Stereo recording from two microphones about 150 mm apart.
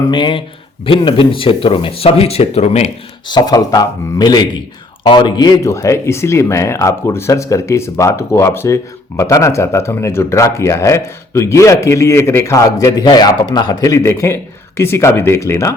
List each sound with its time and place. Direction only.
0.1 s speech: 35° left (ahead or behind)
3.2 s speech: 30° left (ahead or behind)